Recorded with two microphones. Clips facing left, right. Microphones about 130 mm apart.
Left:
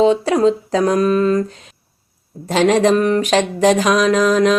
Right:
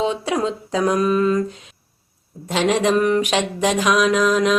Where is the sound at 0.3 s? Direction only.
35° left (ahead or behind).